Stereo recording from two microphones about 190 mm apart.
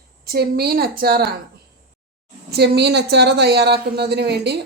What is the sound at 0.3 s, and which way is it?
A woman's voice, 55° right (ahead or behind).